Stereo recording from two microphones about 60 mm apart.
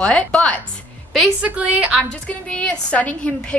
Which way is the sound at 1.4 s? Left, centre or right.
Centre.